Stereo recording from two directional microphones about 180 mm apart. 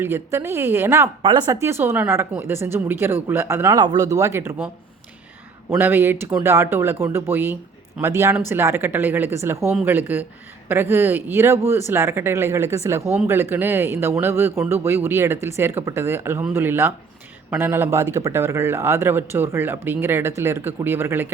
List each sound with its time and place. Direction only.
0.0 s speech: 15° right (ahead or behind)
1.2 s speech: 25° right (ahead or behind)
1.6 s speech: 15° right (ahead or behind)
5.7 s speech: 10° right (ahead or behind)